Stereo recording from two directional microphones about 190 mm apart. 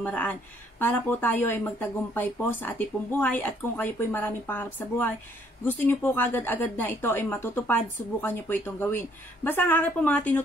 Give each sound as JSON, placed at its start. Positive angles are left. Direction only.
{"t": 0.0, "sound": "speech", "side_deg": 10}